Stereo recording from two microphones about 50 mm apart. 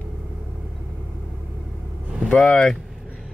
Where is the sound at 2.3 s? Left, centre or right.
Centre.